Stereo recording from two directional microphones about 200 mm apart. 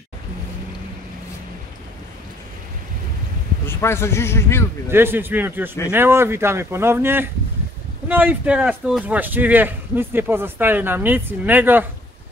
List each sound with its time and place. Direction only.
3.6 s a man's voice: 10° left (ahead or behind)
4.8 s speech: 10° right (ahead or behind)